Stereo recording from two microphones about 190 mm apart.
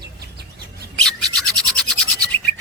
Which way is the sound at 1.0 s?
Centre (ahead or behind).